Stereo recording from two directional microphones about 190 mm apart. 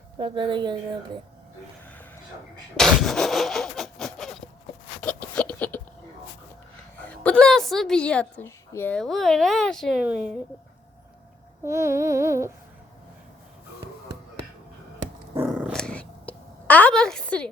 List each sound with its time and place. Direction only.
0.2 s a woman's voice: 25° right (ahead or behind)
2.7 s vehicle: centre (ahead or behind)
4.9 s a sound: 5° left (ahead or behind)
7.1 s a woman's voice: 5° left (ahead or behind)
11.6 s a sound: 15° right (ahead or behind)
15.4 s dog: 5° right (ahead or behind)